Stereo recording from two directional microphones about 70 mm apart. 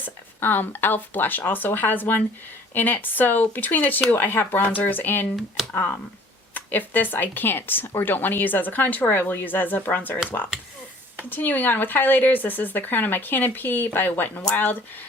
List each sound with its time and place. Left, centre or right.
0.0 s speech: left
11.3 s speech: left